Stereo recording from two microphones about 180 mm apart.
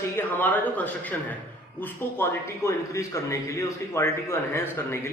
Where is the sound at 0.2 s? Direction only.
10° left (ahead or behind).